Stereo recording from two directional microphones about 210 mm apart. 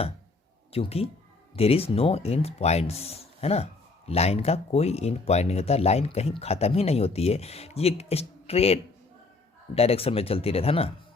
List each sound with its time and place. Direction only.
0.7 s speech: 30° left (ahead or behind)